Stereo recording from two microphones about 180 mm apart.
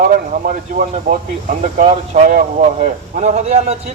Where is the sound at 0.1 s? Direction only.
45° right (ahead or behind).